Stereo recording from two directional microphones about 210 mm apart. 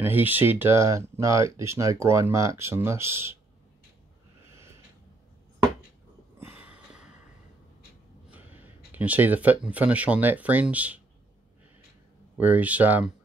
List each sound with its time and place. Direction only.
0.0 s speech: 10° right (ahead or behind)
6.4 s snort: 5° right (ahead or behind)
8.3 s speech: 10° right (ahead or behind)
12.4 s speech: 10° right (ahead or behind)